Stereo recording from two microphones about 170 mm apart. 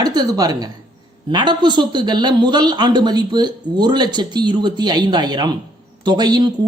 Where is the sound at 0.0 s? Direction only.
25° right (ahead or behind).